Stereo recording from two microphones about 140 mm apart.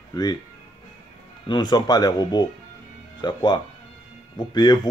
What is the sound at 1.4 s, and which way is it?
Speech, 30° left (ahead or behind).